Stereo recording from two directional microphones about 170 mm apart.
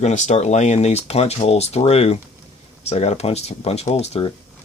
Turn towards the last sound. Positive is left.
turn(degrees=40)  # may be behind; listen again after turning